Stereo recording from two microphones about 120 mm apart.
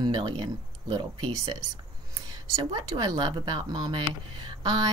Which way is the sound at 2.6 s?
40° right (ahead or behind).